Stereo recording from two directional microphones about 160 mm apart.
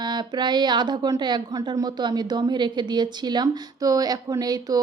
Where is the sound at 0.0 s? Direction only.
25° right (ahead or behind).